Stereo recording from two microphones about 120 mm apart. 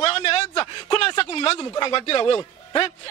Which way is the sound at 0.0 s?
50° left (ahead or behind).